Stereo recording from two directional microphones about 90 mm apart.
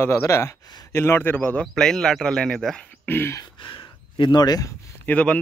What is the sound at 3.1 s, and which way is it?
Speech, 25° left (ahead or behind).